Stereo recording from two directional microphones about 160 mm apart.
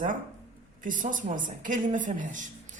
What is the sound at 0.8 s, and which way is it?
A woman's voice, 55° right (ahead or behind).